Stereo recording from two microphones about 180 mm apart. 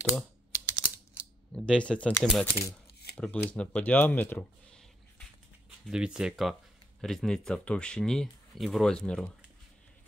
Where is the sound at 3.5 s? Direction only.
5° left (ahead or behind).